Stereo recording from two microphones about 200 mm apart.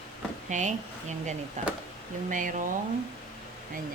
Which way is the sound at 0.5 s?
35° right (ahead or behind).